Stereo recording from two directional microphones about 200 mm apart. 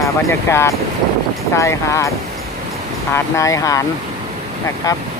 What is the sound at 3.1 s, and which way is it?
Speech, 15° left (ahead or behind).